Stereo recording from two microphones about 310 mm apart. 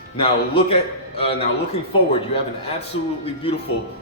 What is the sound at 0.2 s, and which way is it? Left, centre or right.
A man's voice, centre.